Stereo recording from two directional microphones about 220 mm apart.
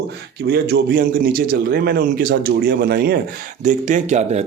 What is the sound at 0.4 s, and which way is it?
A man's voice, 45° right (ahead or behind).